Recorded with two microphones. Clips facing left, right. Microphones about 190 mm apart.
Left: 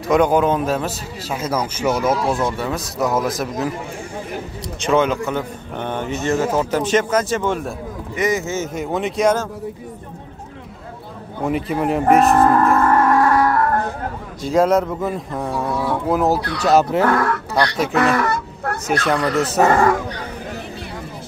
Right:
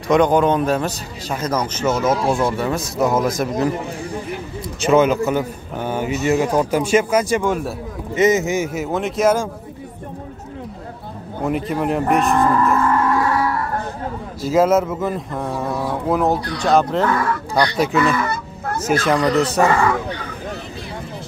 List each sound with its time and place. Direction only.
0.1 s a man's voice: 5° left (ahead or behind)
2.4 s a man's voice: centre (ahead or behind)
4.8 s a man's voice: 5° right (ahead or behind)
8.2 s a man's voice: 20° right (ahead or behind); by 9.5 s 5° right (ahead or behind)
11.4 s a man's voice: centre (ahead or behind)
12.4 s music: 55° left (ahead or behind)
14.4 s a man's voice: 5° right (ahead or behind)
17.0 s speech: 60° left (ahead or behind)
17.9 s fowl: 75° left (ahead or behind)
18.9 s a man's voice: centre (ahead or behind)
19.7 s speech: 40° left (ahead or behind)